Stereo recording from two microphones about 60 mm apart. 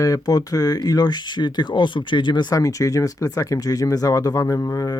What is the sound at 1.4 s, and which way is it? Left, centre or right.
Speech, left.